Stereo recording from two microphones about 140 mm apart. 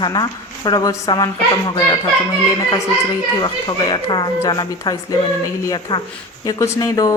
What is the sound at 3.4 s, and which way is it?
A woman's voice, 30° left (ahead or behind).